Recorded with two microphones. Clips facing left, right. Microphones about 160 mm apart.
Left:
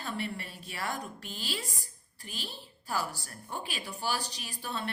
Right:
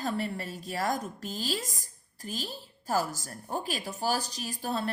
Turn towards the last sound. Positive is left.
turn(degrees=-40)  # may be behind; listen again after turning